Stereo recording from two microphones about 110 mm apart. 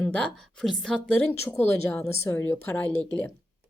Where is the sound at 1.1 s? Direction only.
20° left (ahead or behind).